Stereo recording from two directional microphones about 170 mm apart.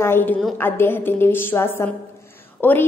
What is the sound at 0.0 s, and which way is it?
A woman's voice, 10° left (ahead or behind).